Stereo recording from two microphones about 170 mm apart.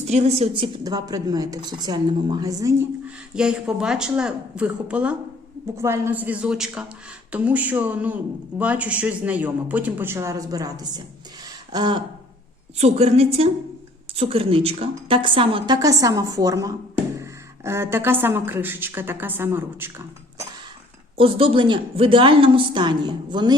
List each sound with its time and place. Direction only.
0.1 s a woman's voice: 40° right (ahead or behind); by 2.8 s 20° right (ahead or behind)
3.3 s a woman's voice: 5° right (ahead or behind); by 12.0 s 25° right (ahead or behind)
12.7 s a woman's voice: 40° right (ahead or behind); by 19.9 s 15° right (ahead or behind)
21.2 s a woman's voice: 35° right (ahead or behind)